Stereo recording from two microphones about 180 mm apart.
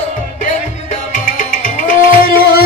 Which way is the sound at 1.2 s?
45° left (ahead or behind).